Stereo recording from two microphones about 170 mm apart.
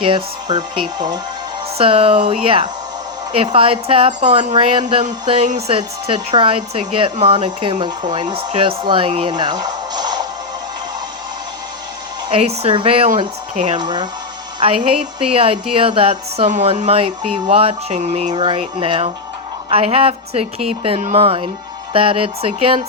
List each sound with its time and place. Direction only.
0.0 s speech: 30° right (ahead or behind)
12.6 s speech: 35° right (ahead or behind)
18.3 s speech: 30° right (ahead or behind)